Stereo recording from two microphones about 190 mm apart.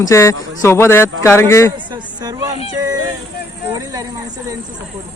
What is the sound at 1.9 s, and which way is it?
Speech, 20° right (ahead or behind).